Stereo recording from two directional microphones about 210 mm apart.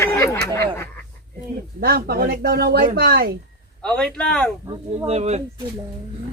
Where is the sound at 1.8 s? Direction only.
45° right (ahead or behind).